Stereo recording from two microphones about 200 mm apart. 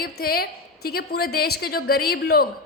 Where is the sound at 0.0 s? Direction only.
50° left (ahead or behind).